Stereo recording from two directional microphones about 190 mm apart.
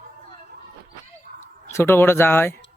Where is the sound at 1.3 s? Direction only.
50° right (ahead or behind).